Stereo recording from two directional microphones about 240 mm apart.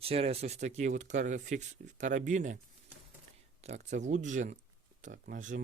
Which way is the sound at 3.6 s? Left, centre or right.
Right.